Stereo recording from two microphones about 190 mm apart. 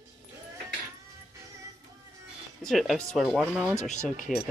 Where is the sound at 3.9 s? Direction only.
45° left (ahead or behind).